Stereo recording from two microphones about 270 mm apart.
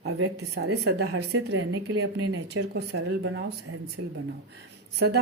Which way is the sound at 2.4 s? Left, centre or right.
Right.